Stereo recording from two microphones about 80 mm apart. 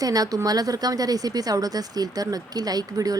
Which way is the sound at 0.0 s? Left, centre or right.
Right.